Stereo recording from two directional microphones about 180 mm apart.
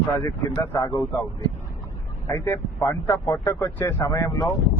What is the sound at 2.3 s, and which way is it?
Speech, 15° left (ahead or behind).